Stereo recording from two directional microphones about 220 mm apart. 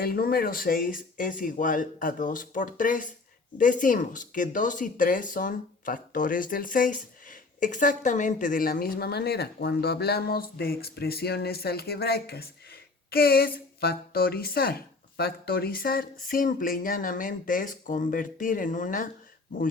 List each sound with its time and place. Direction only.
0.0 s a woman's voice: 45° left (ahead or behind)